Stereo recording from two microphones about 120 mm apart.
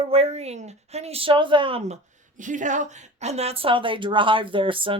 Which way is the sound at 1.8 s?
80° right.